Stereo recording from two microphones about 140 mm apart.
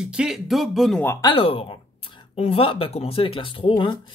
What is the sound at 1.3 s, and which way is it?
Speech, 40° left (ahead or behind).